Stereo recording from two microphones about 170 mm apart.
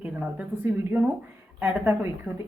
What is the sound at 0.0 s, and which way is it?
Speech, 5° right (ahead or behind).